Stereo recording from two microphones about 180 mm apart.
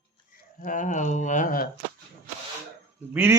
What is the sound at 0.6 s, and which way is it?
Speech, 45° left (ahead or behind).